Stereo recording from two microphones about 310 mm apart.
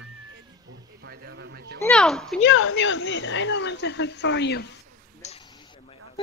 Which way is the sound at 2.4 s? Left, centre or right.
Left.